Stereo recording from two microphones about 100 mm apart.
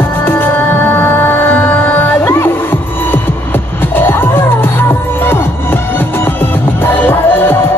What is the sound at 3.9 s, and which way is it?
Music, 20° left (ahead or behind).